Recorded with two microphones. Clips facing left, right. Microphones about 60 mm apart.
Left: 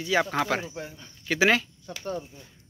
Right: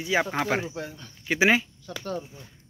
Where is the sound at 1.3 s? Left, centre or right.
Centre.